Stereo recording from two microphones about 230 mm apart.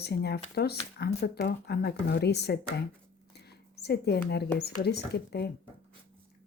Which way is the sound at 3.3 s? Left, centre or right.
Left.